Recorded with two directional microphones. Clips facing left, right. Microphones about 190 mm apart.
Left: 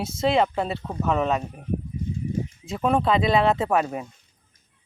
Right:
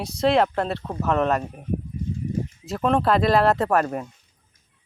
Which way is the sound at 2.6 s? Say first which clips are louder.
Right 1 dB; centre (ahead or behind).